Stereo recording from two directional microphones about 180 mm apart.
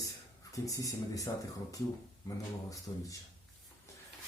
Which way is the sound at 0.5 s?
20° left (ahead or behind).